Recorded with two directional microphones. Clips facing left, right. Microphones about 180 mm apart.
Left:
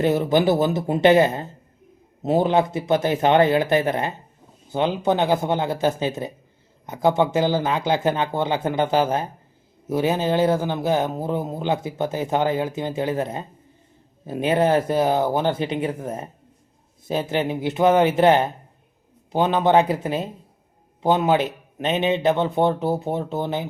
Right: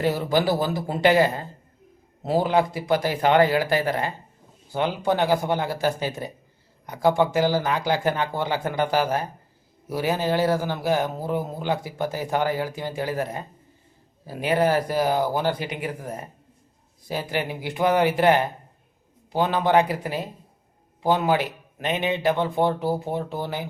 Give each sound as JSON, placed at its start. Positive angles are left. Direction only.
{"t": 0.0, "sound": "speech", "side_deg": 20}